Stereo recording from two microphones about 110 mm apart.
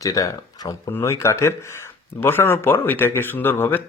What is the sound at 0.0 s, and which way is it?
Speech, 30° left (ahead or behind).